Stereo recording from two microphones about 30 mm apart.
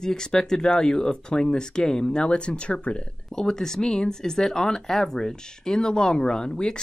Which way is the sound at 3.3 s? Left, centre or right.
Centre.